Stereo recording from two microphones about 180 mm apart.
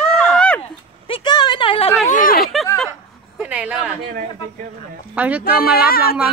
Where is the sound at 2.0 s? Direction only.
50° left (ahead or behind).